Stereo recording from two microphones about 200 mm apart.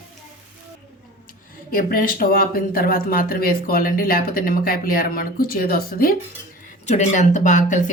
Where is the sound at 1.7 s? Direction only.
45° left (ahead or behind).